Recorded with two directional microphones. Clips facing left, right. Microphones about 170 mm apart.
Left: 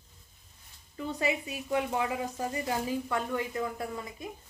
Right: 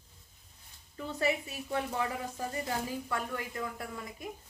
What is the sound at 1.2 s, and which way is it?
A woman's voice, 15° left (ahead or behind).